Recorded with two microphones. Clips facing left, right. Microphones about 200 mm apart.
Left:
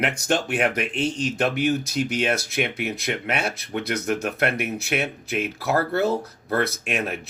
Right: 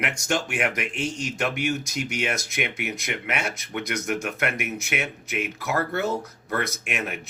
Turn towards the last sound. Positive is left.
turn(degrees=35)  # may be behind; listen again after turning